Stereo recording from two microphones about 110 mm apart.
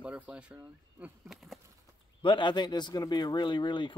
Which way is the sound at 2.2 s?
45° left (ahead or behind).